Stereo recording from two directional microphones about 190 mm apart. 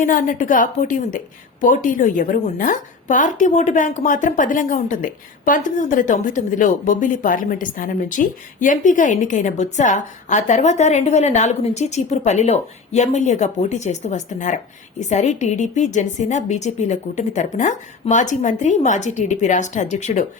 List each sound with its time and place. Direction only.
0.0 s a woman's voice: 45° left (ahead or behind)